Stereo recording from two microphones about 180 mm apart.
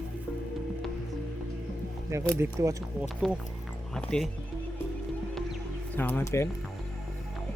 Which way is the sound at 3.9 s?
5° left (ahead or behind).